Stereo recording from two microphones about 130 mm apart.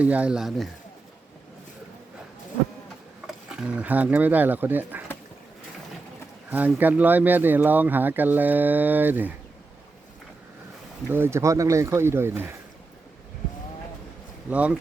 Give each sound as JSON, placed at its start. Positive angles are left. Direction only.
{"t": 0.0, "sound": "speech", "side_deg": -10}
{"t": 3.2, "sound": "speech", "side_deg": -5}
{"t": 6.5, "sound": "speech", "side_deg": -15}
{"t": 11.1, "sound": "speech", "side_deg": -20}
{"t": 14.5, "sound": "speech", "side_deg": -10}